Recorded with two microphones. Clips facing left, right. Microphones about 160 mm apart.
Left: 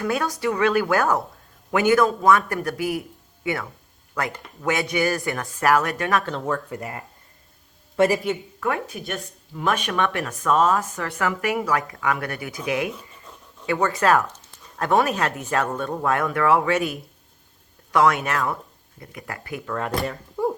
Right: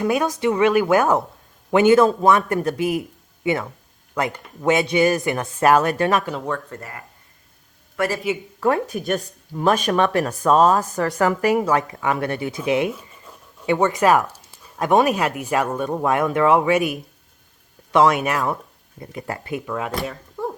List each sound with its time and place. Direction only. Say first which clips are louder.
0.0 s speech: right 4 dB; 20° right (ahead or behind)
6.3 s speech: even; centre (ahead or behind)
6.7 s a man's voice: left 4 dB; 20° left (ahead or behind)
8.6 s speech: right 6 dB; 40° right (ahead or behind); by 12.9 s 25° right (ahead or behind)
13.3 s a sound: right 2 dB; 10° right (ahead or behind)
13.7 s speech: right 3 dB; 20° right (ahead or behind)
18.9 s speech: right 6 dB; 30° right (ahead or behind)
19.6 s speech: left 3 dB; 5° right (ahead or behind)
20.4 s a sound: left 4 dB; 15° left (ahead or behind)